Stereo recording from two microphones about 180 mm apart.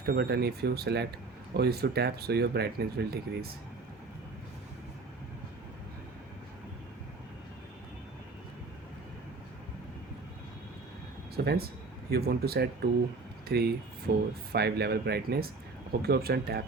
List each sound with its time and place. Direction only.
0.0 s speech: 60° right (ahead or behind)
11.4 s speech: 60° right (ahead or behind)